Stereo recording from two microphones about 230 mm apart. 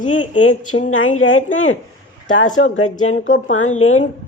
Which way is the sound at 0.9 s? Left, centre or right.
Left.